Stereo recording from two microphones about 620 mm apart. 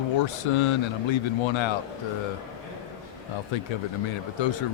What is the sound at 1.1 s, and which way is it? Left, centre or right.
Speech, left.